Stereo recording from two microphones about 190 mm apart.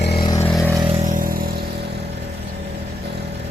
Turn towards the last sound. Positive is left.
turn(degrees=-50)  # may be behind; listen again after turning